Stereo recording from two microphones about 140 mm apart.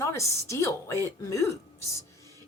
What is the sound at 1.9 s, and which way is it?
Whispering, 20° left (ahead or behind).